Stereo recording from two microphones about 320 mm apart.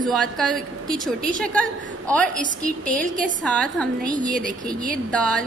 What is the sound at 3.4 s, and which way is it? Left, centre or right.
Speech, centre.